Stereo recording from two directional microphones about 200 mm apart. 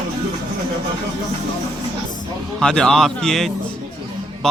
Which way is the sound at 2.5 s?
5° left (ahead or behind).